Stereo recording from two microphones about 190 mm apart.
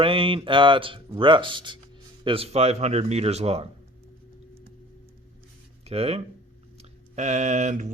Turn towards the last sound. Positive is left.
turn(degrees=-40)  # may be behind; listen again after turning